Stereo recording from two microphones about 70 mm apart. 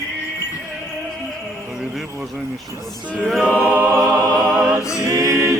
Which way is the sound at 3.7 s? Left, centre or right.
Right.